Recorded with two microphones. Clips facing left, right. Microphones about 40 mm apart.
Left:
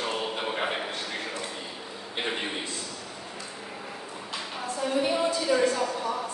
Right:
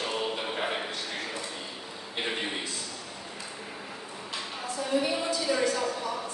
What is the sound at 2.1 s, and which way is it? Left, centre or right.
Speech, centre.